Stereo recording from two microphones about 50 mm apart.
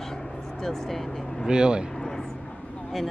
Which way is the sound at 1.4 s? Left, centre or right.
Centre.